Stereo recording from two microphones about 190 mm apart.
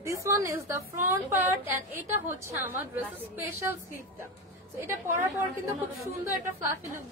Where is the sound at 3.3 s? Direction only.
10° right (ahead or behind).